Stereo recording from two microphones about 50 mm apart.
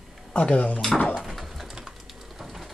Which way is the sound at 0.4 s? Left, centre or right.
Left.